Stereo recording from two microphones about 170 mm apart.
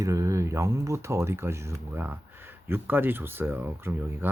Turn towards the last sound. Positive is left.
turn(degrees=-10)  # may be behind; listen again after turning